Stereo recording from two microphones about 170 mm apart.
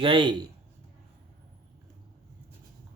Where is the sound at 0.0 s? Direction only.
30° right (ahead or behind).